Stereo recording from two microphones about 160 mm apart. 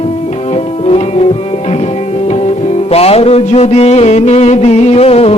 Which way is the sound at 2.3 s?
40° left (ahead or behind).